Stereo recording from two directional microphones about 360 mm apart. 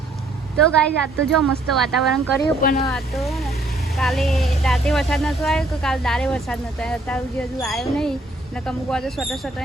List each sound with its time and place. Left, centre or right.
0.6 s speech: centre
2.6 s speech: left
2.8 s speech: centre